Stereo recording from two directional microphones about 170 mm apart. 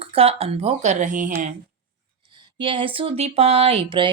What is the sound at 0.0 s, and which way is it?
Speech, 35° right (ahead or behind).